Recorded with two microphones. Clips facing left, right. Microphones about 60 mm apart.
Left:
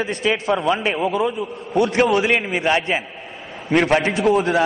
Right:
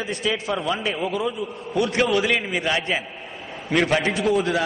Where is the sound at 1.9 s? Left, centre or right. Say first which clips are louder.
Left 3 dB; left.